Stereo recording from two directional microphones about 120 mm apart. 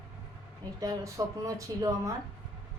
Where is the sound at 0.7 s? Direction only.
30° right (ahead or behind).